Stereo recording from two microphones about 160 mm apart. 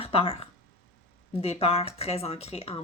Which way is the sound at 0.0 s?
35° left (ahead or behind).